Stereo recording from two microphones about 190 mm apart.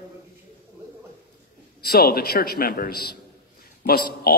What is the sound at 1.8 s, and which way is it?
A man's voice, 55° left (ahead or behind).